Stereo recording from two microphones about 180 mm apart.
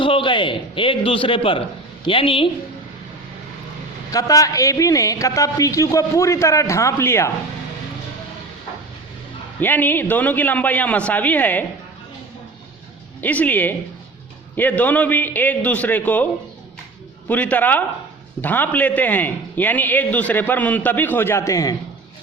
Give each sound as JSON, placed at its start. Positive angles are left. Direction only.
{"t": 0.0, "sound": "a man's voice", "side_deg": 30}
{"t": 4.1, "sound": "a man's voice", "side_deg": 20}
{"t": 9.6, "sound": "a man's voice", "side_deg": 10}
{"t": 13.2, "sound": "a man's voice", "side_deg": 10}